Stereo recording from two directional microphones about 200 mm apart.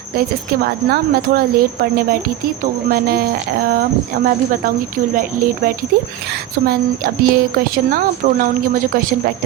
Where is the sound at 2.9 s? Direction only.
45° right (ahead or behind).